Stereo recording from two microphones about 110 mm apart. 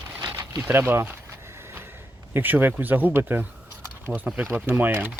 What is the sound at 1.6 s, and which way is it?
Gasp, 20° right (ahead or behind).